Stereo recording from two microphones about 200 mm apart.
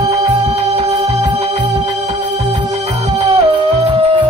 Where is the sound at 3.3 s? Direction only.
30° right (ahead or behind).